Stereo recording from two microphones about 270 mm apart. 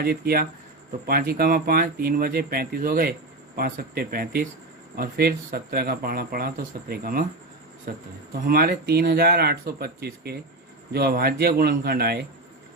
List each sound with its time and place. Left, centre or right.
0.0 s speech: right
8.3 s speech: right